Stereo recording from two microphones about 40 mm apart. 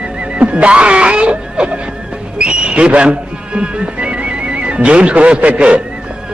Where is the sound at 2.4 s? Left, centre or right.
Right.